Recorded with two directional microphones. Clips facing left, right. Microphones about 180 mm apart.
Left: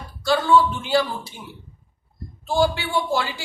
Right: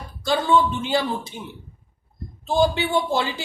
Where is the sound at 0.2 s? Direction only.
20° right (ahead or behind).